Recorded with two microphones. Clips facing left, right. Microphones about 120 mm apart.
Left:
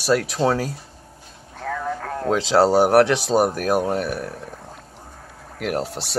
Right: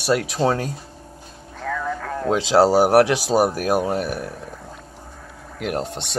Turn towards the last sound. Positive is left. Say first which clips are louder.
# left 1 dB
turn(degrees=5)  # may be behind; listen again after turning